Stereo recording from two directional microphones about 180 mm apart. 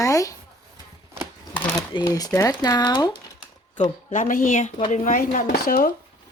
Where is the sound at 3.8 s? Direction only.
40° left (ahead or behind).